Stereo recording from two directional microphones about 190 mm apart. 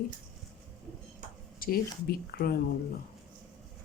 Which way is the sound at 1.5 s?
50° left (ahead or behind).